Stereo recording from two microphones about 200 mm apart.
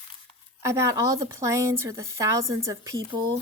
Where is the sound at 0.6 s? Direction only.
15° right (ahead or behind).